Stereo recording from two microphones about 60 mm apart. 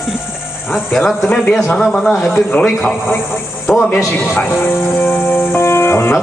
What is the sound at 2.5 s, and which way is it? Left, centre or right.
Speech, left.